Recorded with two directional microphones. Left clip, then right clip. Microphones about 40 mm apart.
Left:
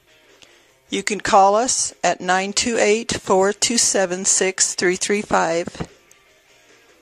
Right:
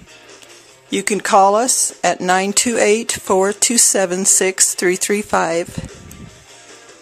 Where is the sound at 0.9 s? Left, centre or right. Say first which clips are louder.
Right 3 dB; left.